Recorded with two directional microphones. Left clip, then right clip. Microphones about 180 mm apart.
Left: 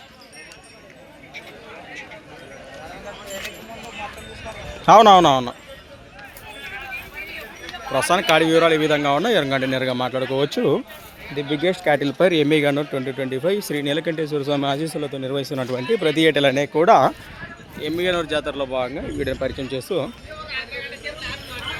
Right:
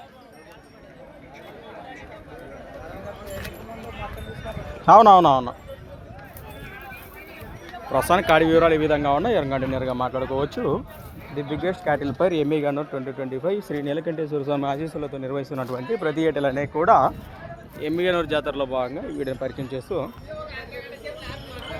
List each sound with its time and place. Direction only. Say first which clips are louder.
4.9 s speech: left 1 dB; 15° left (ahead or behind)
7.9 s speech: left 1 dB; centre (ahead or behind); by 10.8 s 35° left (ahead or behind)
11.3 s speech: left 5 dB; centre (ahead or behind)
12.0 s speech: left 4 dB; 25° left (ahead or behind)
16.6 s speech: even; 50° left (ahead or behind)
17.7 s speech: left 1 dB; 5° left (ahead or behind); by 20.1 s 30° left (ahead or behind)
20.7 s a sound: left 5 dB; 5° right (ahead or behind)